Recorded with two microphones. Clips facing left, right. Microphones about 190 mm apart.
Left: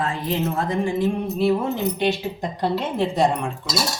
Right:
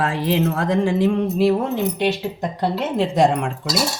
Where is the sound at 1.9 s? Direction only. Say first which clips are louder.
Right 1 dB; 70° right (ahead or behind); by 3.5 s 90° right.